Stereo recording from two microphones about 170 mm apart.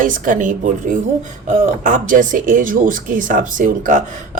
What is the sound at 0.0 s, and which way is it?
A woman's voice, 50° right (ahead or behind).